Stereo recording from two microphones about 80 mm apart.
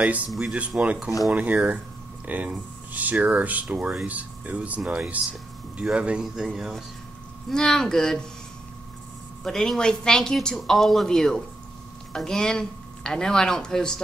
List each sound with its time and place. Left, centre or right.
0.3 s speech: centre
0.6 s speech: centre
7.4 s a woman's voice: centre
9.4 s a woman's voice: centre